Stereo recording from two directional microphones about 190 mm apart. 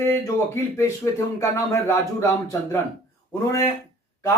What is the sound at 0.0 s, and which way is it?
A man's voice, 15° left (ahead or behind).